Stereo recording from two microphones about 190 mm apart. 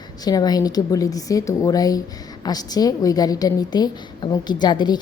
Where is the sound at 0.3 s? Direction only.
20° left (ahead or behind).